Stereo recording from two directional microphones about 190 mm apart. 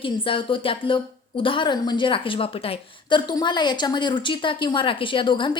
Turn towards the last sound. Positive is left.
turn(degrees=25)  # may be behind; listen again after turning